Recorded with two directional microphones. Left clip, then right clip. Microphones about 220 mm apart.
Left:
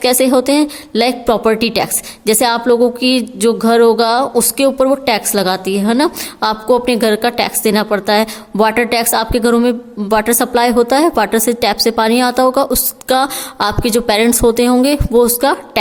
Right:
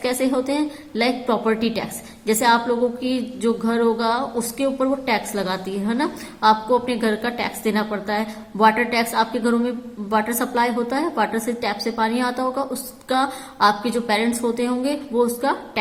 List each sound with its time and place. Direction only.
0.0 s a woman's voice: 50° left (ahead or behind)